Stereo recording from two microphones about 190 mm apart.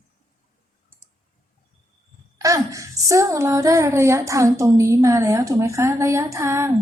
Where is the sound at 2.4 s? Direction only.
15° right (ahead or behind).